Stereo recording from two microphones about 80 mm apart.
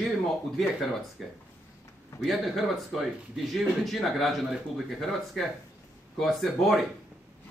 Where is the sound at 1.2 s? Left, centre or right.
Centre.